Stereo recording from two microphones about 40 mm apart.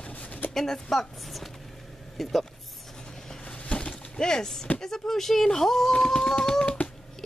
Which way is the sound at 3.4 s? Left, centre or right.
Left.